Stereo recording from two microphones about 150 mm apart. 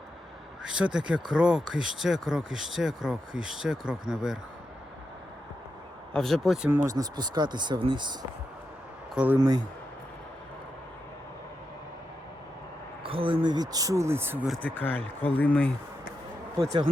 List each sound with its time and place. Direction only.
0.6 s speech: 5° right (ahead or behind)
6.1 s speech: centre (ahead or behind)
6.7 s speech: 20° right (ahead or behind)
9.1 s speech: 10° right (ahead or behind)
13.0 s speech: 35° right (ahead or behind); by 14.4 s 15° right (ahead or behind)
14.6 s speech: 10° left (ahead or behind)